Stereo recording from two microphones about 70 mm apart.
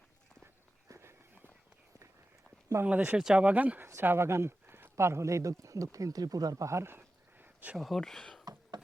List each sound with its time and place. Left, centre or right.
0.9 s walk: right
2.8 s speech: centre
3.8 s speech: right
6.7 s a sound: right
7.8 s speech: centre